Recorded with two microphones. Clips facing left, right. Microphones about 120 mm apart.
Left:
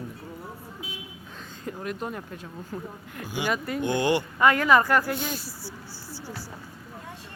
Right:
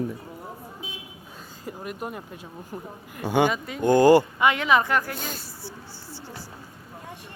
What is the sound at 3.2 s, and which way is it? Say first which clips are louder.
Speech: right 11 dB; 60° right (ahead or behind).